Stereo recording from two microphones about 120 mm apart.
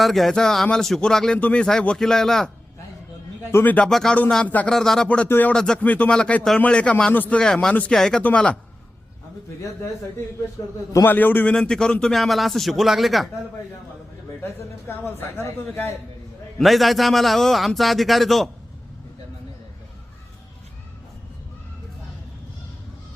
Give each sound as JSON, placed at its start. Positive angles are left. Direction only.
{"t": 0.0, "sound": "speech", "side_deg": 0}
{"t": 3.4, "sound": "speech", "side_deg": 20}
{"t": 10.9, "sound": "speech", "side_deg": 15}
{"t": 14.4, "sound": "speech", "side_deg": 20}
{"t": 16.6, "sound": "speech", "side_deg": 0}